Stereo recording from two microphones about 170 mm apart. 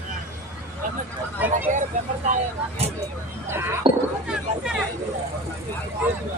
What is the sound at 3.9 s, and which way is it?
Speech, 30° right (ahead or behind).